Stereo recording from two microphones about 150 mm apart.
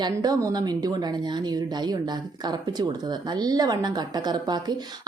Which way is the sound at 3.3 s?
25° right (ahead or behind).